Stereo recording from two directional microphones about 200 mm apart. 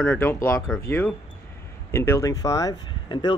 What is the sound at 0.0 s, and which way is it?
Speech, 10° left (ahead or behind).